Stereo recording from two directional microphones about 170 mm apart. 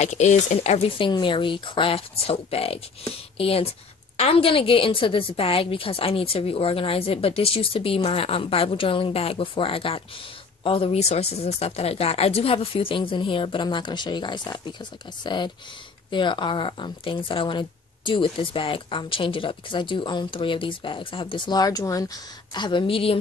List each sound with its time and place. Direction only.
0.0 s a woman's voice: 45° left (ahead or behind)